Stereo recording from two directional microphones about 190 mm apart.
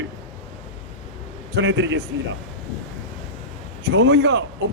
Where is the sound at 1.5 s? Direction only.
65° right (ahead or behind).